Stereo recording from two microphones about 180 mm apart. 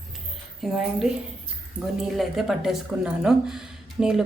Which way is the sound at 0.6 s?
Centre (ahead or behind).